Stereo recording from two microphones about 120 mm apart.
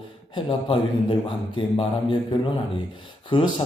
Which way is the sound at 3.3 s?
40° left (ahead or behind).